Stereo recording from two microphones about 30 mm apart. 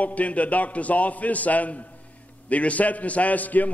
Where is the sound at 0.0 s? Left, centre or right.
Left.